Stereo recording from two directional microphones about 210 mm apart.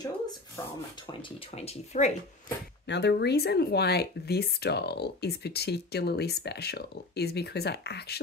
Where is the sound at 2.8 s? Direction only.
55° left (ahead or behind).